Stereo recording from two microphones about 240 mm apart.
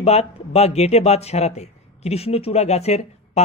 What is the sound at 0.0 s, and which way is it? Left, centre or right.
Speech, left.